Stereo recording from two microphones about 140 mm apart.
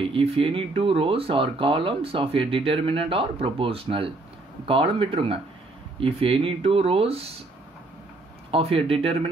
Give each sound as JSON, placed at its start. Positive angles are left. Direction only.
{"t": 0.0, "sound": "speech", "side_deg": -40}
{"t": 8.5, "sound": "speech", "side_deg": -40}